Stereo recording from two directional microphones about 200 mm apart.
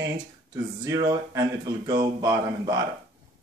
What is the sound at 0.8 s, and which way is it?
Speech, 15° right (ahead or behind).